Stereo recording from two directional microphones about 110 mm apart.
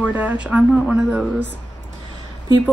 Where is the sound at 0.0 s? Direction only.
15° right (ahead or behind).